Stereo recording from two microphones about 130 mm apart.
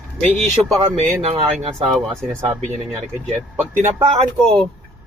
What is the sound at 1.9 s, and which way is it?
Speech, centre (ahead or behind).